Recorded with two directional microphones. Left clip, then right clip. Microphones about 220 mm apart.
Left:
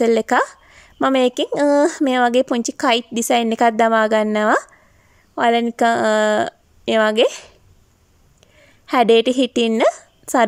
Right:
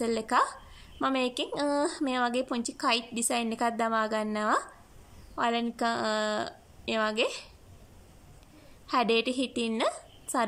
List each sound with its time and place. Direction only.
0.0 s a woman's voice: 35° left (ahead or behind)
8.8 s a woman's voice: 35° left (ahead or behind)